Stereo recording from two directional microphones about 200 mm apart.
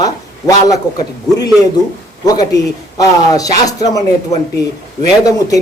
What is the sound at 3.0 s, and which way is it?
A man's voice, 20° left (ahead or behind).